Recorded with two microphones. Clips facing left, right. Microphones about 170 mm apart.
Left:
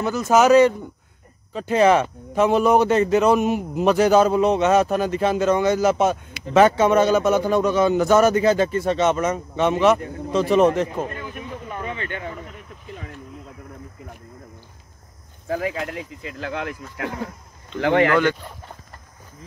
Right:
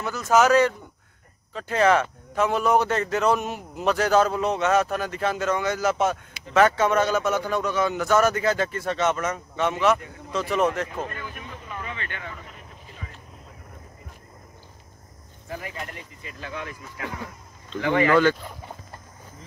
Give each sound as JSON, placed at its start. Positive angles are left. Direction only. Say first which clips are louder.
{"t": 0.0, "sound": "a man's voice", "louder": "left 3 dB", "side_deg": 20}
{"t": 9.9, "sound": "speech", "louder": "left 9 dB", "side_deg": 40}
{"t": 10.3, "sound": "speech", "louder": "left 7 dB", "side_deg": 25}
{"t": 12.9, "sound": "a sound", "louder": "left 8 dB", "side_deg": 55}
{"t": 15.4, "sound": "speech", "louder": "left 10 dB", "side_deg": 90}